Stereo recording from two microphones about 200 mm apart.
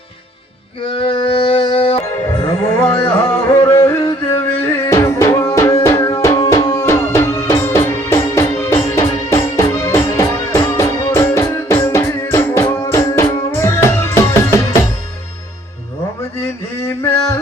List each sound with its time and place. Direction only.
0.9 s music: 25° left (ahead or behind)
2.6 s carnatic music: 10° left (ahead or behind)
3.5 s music: 15° left (ahead or behind)
16.4 s a sound: 10° left (ahead or behind)